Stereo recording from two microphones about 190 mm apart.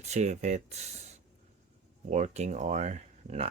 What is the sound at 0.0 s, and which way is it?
Speech, 35° right (ahead or behind).